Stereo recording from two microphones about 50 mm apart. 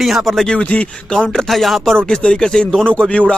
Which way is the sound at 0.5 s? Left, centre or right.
Left.